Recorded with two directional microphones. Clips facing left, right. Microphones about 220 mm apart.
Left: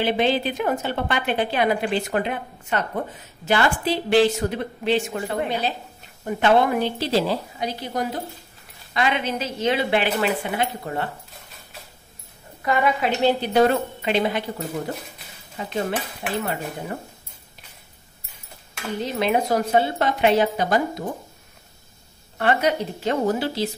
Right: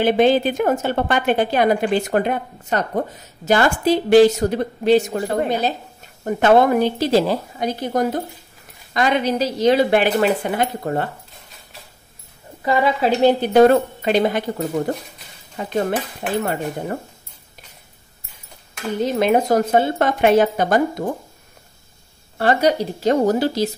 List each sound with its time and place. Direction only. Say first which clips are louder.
0.0 s a woman's voice: right 6 dB; 45° right (ahead or behind)
12.6 s a woman's voice: right 4 dB; 30° right (ahead or behind)
13.4 s a woman's voice: right 6 dB; 50° right (ahead or behind)
19.1 s a woman's voice: right 4 dB; 45° right (ahead or behind)
22.4 s a woman's voice: right 4 dB; 35° right (ahead or behind)